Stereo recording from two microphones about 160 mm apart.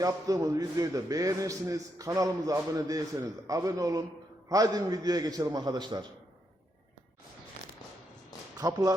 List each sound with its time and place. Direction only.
0.0 s a man's voice: 20° right (ahead or behind)
8.5 s speech: 25° right (ahead or behind)